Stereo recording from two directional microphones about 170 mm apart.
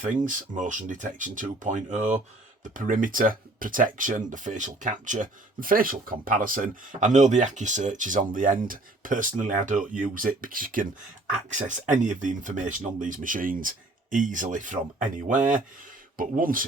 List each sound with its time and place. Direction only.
0.3 s speech: 50° right (ahead or behind)